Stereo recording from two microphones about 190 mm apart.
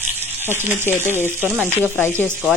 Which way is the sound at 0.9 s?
10° left (ahead or behind).